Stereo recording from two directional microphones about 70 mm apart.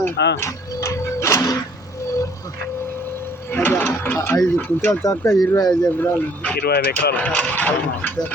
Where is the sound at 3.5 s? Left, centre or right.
Left.